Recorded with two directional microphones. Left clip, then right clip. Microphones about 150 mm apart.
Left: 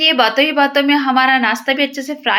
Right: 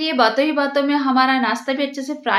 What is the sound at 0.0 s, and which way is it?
A woman's voice, 10° left (ahead or behind).